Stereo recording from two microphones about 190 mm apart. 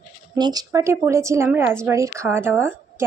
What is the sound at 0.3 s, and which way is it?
A woman's voice, 20° right (ahead or behind).